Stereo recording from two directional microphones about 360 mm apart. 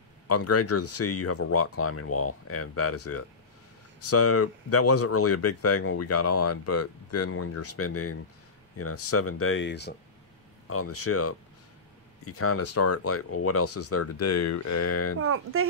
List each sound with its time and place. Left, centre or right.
0.3 s speech: left
15.1 s speech: right